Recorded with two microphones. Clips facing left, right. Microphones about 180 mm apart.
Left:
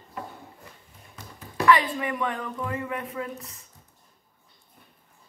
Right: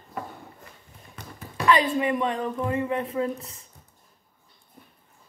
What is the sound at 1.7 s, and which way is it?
Speech, 25° right (ahead or behind).